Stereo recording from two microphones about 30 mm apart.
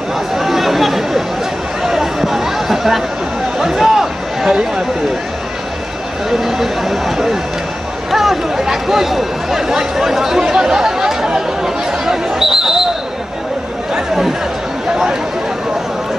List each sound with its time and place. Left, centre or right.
0.3 s chatter: centre
1.8 s a sound: centre
3.5 s speech: centre
6.4 s speech: centre